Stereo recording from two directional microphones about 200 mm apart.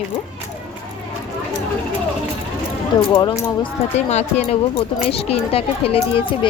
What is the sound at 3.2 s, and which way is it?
Speech, 25° left (ahead or behind).